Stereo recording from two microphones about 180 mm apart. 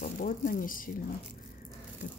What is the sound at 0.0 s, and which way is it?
Speech, 50° left (ahead or behind).